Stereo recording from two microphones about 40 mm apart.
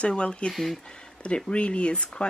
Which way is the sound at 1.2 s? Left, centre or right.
Left.